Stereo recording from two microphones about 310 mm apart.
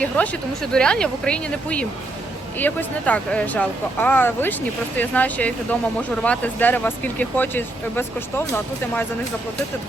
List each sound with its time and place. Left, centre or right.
0.0 s speech: centre